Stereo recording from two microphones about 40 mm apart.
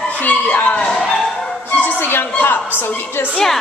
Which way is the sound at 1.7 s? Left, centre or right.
Left.